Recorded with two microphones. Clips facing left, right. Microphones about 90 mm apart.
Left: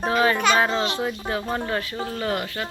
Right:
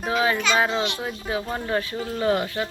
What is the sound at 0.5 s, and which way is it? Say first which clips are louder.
Speech: left 1 dB; 5° right (ahead or behind).